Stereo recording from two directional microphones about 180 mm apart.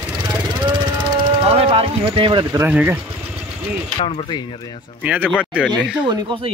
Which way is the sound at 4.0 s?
30° left (ahead or behind).